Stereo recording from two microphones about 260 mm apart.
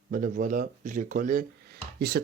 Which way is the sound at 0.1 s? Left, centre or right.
Right.